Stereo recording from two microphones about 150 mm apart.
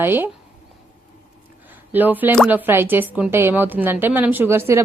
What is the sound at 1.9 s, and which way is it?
Speech, 10° right (ahead or behind).